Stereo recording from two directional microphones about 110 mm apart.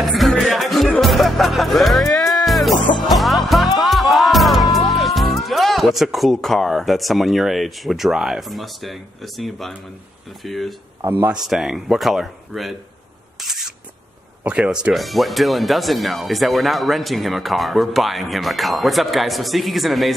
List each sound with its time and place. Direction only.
0.0 s music: centre (ahead or behind)
4.7 s speech: centre (ahead or behind)
11.1 s speech: 20° right (ahead or behind)
11.4 s speech: 5° right (ahead or behind)
13.4 s a sound: centre (ahead or behind)
14.4 s speech: 10° right (ahead or behind)